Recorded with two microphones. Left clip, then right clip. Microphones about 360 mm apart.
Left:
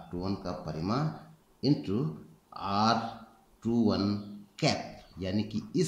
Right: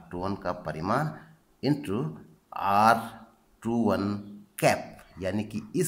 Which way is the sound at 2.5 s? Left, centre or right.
Centre.